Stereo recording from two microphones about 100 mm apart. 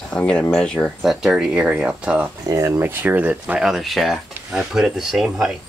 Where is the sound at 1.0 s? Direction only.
5° right (ahead or behind).